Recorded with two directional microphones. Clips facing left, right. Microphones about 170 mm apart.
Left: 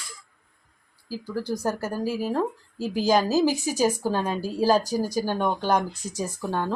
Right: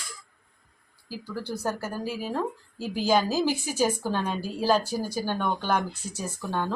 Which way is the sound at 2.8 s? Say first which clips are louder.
Left 2 dB; 40° left (ahead or behind).